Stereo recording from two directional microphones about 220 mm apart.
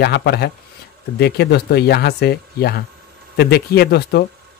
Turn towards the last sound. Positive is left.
turn(degrees=45)  # may be behind; listen again after turning